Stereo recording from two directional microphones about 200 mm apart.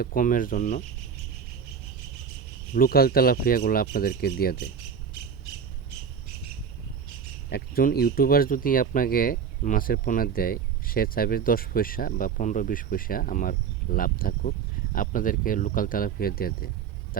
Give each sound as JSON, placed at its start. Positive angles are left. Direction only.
{"t": 0.0, "sound": "speech", "side_deg": 45}
{"t": 2.7, "sound": "speech", "side_deg": 45}
{"t": 7.5, "sound": "speech", "side_deg": 50}